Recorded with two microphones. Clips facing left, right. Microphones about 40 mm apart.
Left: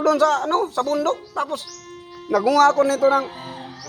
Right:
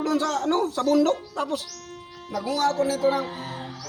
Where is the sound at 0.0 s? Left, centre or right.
Left.